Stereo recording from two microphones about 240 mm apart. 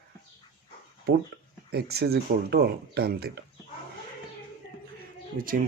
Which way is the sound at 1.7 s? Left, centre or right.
Right.